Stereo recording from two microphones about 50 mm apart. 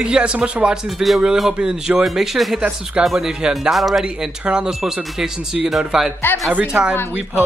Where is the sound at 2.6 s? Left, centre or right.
Right.